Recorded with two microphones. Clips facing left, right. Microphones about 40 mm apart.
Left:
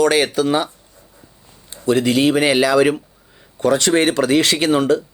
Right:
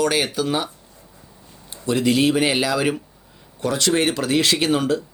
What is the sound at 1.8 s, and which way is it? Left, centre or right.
Speech, centre.